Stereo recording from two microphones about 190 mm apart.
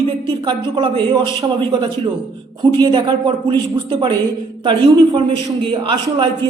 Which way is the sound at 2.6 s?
25° right (ahead or behind).